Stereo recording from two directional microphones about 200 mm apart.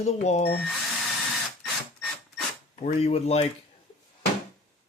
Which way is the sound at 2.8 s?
30° left (ahead or behind).